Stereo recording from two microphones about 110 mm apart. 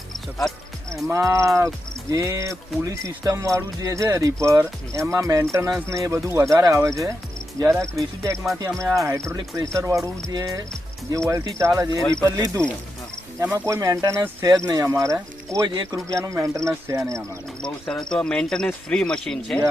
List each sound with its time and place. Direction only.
0.3 s speech: 5° left (ahead or behind)
1.0 s speech: 30° right (ahead or behind)
15.6 s speech: 40° right (ahead or behind)
16.1 s speech: 30° right (ahead or behind)
17.6 s speech: 5° left (ahead or behind)
18.1 s cricket: 5° left (ahead or behind)